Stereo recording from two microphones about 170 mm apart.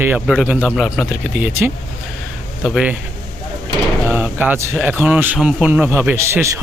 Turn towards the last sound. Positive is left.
turn(degrees=-15)  # may be behind; listen again after turning